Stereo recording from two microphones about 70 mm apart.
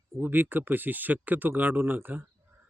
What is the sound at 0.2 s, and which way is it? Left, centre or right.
A man's voice, right.